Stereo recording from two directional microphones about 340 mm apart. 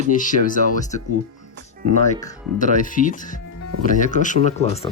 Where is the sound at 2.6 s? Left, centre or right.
Left.